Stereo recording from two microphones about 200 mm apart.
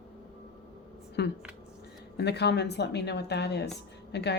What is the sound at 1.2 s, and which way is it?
A woman's voice, 55° left (ahead or behind).